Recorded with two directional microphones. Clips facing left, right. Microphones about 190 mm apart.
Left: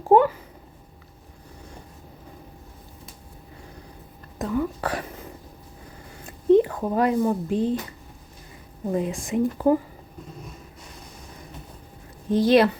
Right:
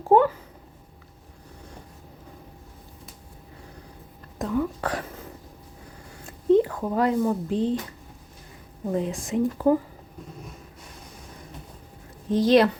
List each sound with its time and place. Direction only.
0.1 s speech: 10° left (ahead or behind)
4.4 s speech: centre (ahead or behind)
6.2 s speech: 20° left (ahead or behind)
8.9 s speech: 10° left (ahead or behind)
12.3 s speech: 10° left (ahead or behind)